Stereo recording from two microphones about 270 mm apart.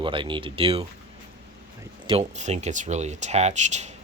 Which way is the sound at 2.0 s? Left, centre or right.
Right.